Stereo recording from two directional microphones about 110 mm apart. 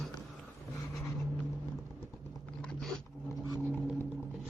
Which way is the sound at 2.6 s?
10° left (ahead or behind).